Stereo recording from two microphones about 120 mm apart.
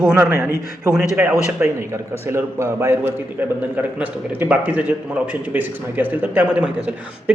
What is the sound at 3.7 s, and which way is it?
A man's voice, 15° right (ahead or behind).